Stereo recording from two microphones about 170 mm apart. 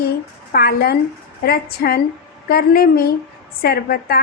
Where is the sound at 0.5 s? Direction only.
65° left (ahead or behind).